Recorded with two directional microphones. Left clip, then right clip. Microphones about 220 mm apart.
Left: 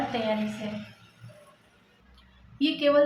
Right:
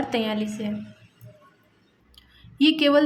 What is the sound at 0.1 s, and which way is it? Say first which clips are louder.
Speech: right 6 dB; 50° right (ahead or behind).